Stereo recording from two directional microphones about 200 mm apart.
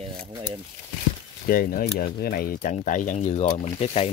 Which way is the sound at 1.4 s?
45° left (ahead or behind).